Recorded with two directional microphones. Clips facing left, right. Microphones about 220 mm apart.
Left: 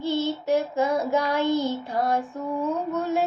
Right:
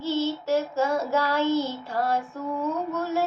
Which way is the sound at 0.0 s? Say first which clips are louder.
Left 1 dB; 15° left (ahead or behind).